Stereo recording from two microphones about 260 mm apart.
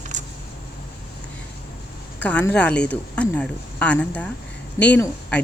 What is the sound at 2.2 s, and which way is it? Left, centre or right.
Speech, centre.